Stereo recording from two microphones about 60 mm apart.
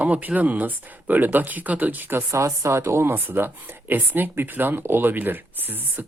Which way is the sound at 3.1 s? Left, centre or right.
Right.